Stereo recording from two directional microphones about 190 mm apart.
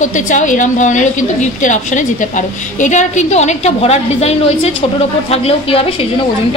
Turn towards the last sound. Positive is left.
turn(degrees=30)  # may be behind; listen again after turning